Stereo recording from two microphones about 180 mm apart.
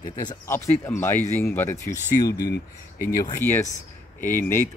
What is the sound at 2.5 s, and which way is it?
Speech, 55° left (ahead or behind).